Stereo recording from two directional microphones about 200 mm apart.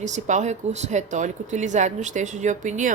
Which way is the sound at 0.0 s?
35° right (ahead or behind).